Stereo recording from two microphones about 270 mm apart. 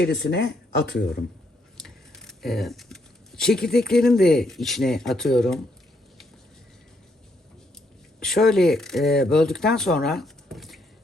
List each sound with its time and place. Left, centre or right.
0.0 s speech: left
1.8 s speech: centre
8.2 s speech: centre